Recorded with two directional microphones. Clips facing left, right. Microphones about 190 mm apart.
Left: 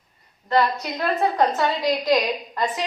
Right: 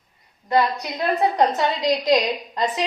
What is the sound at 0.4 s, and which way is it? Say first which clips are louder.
A woman's voice: right 1 dB; 15° right (ahead or behind).